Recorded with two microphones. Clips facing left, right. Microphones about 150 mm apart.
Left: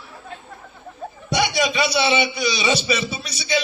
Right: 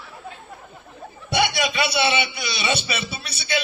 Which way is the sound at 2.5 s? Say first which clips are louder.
Left 1 dB; 55° right (ahead or behind).